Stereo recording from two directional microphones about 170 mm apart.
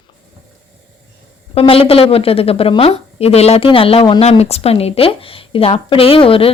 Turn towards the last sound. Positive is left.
turn(degrees=30)  # may be behind; listen again after turning